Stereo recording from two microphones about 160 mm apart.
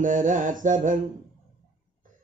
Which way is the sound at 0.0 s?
55° right (ahead or behind).